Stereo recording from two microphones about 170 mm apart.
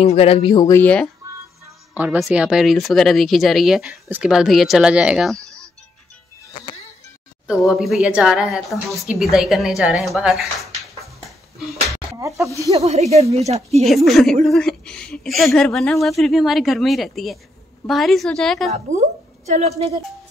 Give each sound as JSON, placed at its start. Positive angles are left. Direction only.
{"t": 0.0, "sound": "speech", "side_deg": 35}
{"t": 0.7, "sound": "speech", "side_deg": 10}
{"t": 2.0, "sound": "speech", "side_deg": -5}
{"t": 7.4, "sound": "speech", "side_deg": 0}
{"t": 12.2, "sound": "speech", "side_deg": -20}
{"t": 12.7, "sound": "speech", "side_deg": -40}
{"t": 13.8, "sound": "speech", "side_deg": 0}
{"t": 18.7, "sound": "a woman's voice", "side_deg": -40}